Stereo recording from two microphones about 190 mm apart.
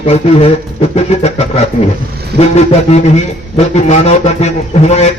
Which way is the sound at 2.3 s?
30° left (ahead or behind).